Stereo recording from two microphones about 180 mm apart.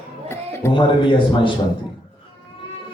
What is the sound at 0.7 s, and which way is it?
Speech, 25° left (ahead or behind).